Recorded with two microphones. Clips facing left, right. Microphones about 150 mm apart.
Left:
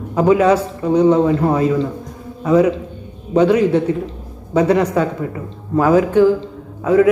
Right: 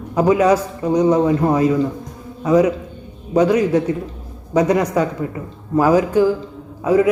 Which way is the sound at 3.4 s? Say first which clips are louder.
Left 2 dB; 10° right (ahead or behind).